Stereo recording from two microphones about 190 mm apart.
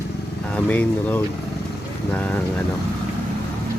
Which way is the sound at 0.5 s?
10° left (ahead or behind).